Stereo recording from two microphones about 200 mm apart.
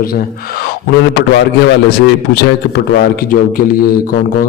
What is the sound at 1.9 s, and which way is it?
Speech, 50° left (ahead or behind).